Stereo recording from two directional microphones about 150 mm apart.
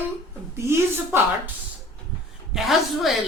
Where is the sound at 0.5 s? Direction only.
15° right (ahead or behind).